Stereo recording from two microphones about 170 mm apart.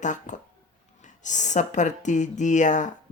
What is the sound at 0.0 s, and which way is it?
Speech, 45° left (ahead or behind).